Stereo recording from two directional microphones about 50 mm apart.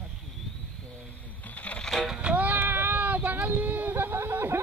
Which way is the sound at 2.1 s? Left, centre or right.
Right.